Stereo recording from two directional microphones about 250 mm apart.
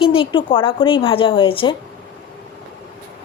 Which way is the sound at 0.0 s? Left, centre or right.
Left.